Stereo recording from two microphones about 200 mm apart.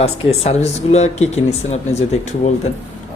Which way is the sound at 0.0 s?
30° left (ahead or behind).